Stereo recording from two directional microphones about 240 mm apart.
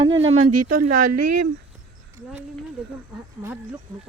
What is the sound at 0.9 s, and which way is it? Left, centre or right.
Speech, right.